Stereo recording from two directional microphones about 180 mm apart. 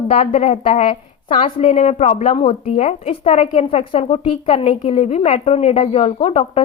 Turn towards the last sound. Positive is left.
turn(degrees=30)  # may be behind; listen again after turning